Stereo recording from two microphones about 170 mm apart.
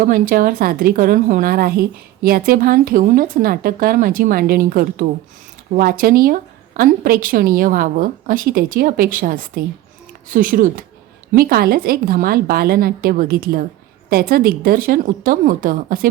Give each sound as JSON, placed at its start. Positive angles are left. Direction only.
{"t": 0.0, "sound": "a woman's voice", "side_deg": -55}